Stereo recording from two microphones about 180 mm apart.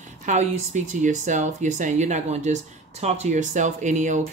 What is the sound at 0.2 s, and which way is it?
Speech, 40° right (ahead or behind).